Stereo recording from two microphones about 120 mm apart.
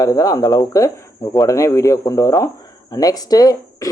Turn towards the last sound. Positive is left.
turn(degrees=30)  # may be behind; listen again after turning